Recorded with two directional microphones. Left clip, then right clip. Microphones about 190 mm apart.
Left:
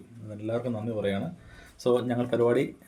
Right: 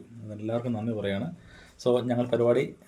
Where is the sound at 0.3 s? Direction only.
10° right (ahead or behind).